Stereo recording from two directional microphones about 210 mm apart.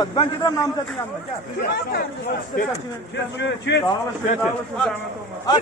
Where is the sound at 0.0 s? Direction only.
20° left (ahead or behind).